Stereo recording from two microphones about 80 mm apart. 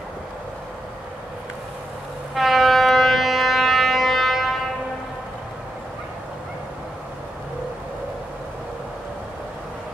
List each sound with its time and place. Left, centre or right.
2.3 s civil defense siren: centre